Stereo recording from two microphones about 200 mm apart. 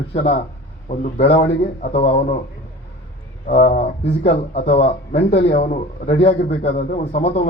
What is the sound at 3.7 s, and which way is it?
A man's voice, 30° left (ahead or behind).